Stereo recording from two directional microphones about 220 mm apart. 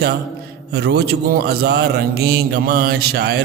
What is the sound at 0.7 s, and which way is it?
A man's voice, 50° right (ahead or behind).